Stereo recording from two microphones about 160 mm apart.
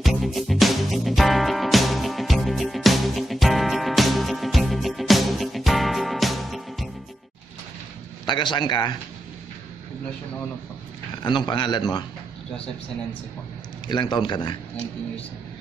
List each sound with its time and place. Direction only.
0.0 s music: centre (ahead or behind)
8.3 s a man's voice: 30° left (ahead or behind)
11.2 s a man's voice: 30° left (ahead or behind)
13.8 s a man's voice: 30° left (ahead or behind)